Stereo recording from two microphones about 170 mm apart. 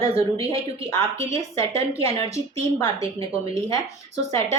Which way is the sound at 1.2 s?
40° right (ahead or behind).